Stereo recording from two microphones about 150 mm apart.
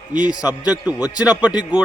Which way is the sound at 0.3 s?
25° left (ahead or behind).